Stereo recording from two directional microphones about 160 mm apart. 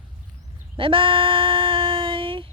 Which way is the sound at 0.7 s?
35° right (ahead or behind).